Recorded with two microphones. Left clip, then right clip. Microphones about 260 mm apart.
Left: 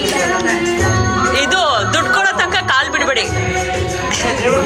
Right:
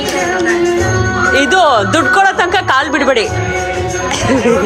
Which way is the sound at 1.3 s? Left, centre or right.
Centre.